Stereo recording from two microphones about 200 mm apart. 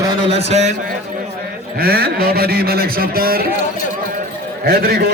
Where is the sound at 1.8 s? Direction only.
50° right (ahead or behind).